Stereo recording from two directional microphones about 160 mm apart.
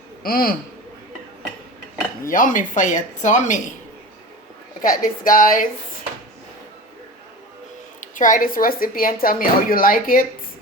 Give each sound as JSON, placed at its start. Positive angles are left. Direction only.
{"t": 0.2, "sound": "a man's voice", "side_deg": 65}
{"t": 2.3, "sound": "speech", "side_deg": 55}
{"t": 4.8, "sound": "speech", "side_deg": 60}
{"t": 8.0, "sound": "speech", "side_deg": 55}